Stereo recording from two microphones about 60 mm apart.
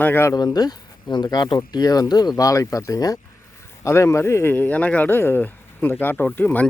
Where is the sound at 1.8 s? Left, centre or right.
Left.